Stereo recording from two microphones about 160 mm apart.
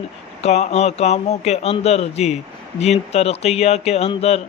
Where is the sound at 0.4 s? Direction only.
40° left (ahead or behind).